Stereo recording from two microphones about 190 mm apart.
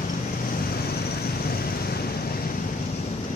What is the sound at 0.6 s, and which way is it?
Vehicle, 55° left (ahead or behind).